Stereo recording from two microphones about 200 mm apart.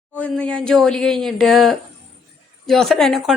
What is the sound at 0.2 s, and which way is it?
Speech, 5° left (ahead or behind).